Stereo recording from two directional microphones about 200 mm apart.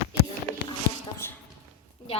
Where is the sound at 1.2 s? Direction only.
10° left (ahead or behind).